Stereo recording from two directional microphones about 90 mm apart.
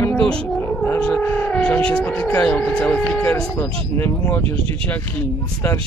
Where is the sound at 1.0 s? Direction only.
20° left (ahead or behind).